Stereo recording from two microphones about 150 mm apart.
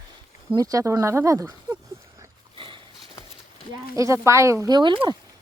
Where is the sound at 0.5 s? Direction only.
25° right (ahead or behind).